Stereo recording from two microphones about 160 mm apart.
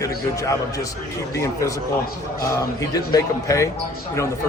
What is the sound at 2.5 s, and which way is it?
Speech, 20° left (ahead or behind).